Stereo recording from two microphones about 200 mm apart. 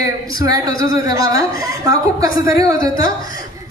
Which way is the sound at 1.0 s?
20° right (ahead or behind).